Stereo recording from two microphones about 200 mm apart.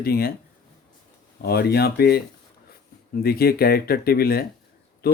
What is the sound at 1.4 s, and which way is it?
Speech, 50° left (ahead or behind).